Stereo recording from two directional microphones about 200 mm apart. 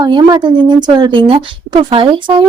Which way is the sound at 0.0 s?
20° right (ahead or behind).